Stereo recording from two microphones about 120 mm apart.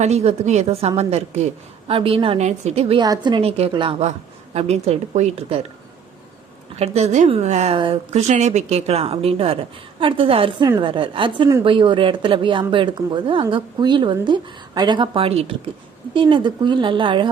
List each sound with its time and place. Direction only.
0.0 s speech: 60° right (ahead or behind)
1.9 s a woman's voice: 50° right (ahead or behind)
2.4 s speech: 70° right (ahead or behind)
3.0 s a woman's voice: 40° right (ahead or behind)
3.4 s a woman's voice: 50° right (ahead or behind)
4.5 s speech: 60° right (ahead or behind)
6.7 s a woman's voice: 60° right (ahead or behind)
16.1 s a woman's voice: 40° right (ahead or behind)